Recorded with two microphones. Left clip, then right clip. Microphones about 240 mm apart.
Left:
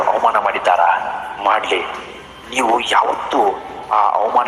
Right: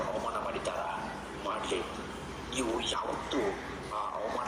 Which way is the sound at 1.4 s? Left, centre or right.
Left.